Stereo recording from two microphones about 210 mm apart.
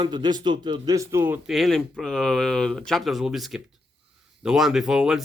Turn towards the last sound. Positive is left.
turn(degrees=0)  # may be behind; listen again after turning